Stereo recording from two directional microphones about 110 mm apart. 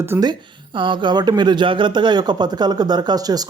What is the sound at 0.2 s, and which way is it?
Speech, 45° right (ahead or behind).